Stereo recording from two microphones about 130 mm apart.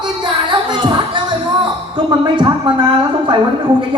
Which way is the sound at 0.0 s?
35° right (ahead or behind).